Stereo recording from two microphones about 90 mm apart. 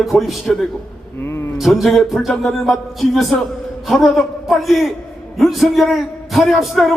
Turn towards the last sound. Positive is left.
turn(degrees=0)  # may be behind; listen again after turning